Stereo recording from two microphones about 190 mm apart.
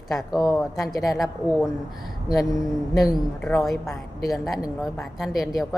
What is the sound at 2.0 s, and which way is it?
A woman's voice, centre (ahead or behind).